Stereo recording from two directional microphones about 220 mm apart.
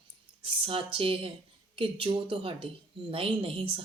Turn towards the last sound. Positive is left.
turn(degrees=-25)  # may be behind; listen again after turning